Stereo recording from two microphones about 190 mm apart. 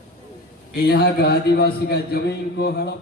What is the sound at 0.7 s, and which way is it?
A man's voice, 55° left (ahead or behind).